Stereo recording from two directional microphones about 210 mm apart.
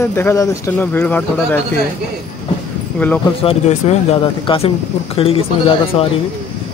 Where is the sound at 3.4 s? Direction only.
30° left (ahead or behind).